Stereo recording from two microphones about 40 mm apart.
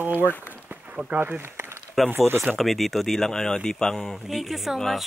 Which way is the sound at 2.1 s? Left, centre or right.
Right.